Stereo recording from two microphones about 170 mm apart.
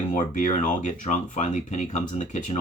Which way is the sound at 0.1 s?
50° left (ahead or behind).